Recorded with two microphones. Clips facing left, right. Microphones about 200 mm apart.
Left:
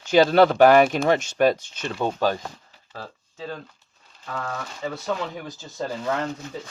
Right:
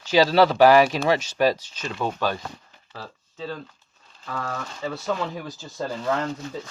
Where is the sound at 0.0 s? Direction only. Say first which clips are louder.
Left 2 dB; 50° left (ahead or behind).